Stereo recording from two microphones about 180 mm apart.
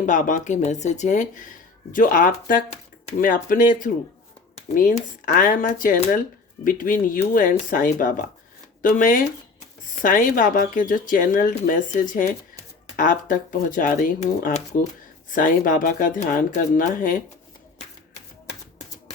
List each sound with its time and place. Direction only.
0.0 s speech: 45° left (ahead or behind)